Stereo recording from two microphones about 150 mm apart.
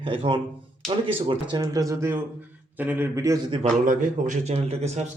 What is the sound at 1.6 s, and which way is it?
A man's voice, 20° right (ahead or behind).